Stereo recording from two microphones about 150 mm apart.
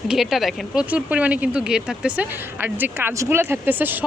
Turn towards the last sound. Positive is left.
turn(degrees=-10)  # may be behind; listen again after turning